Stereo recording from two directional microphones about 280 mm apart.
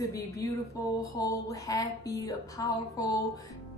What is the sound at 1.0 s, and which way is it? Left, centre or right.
A woman's voice, centre.